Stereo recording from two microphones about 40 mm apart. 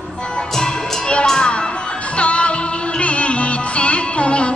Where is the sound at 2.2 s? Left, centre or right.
Left.